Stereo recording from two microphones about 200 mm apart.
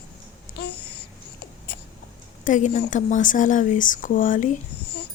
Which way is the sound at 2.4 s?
40° left (ahead or behind).